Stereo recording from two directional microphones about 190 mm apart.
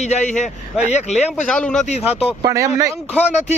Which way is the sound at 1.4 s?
5° left (ahead or behind).